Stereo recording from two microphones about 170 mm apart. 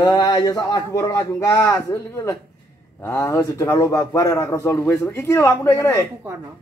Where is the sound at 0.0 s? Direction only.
20° left (ahead or behind).